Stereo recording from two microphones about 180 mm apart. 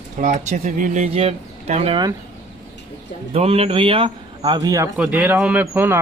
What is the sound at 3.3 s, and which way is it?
A man's voice, 35° right (ahead or behind).